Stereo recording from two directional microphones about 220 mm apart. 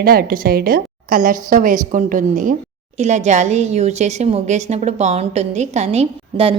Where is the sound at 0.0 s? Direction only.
40° right (ahead or behind).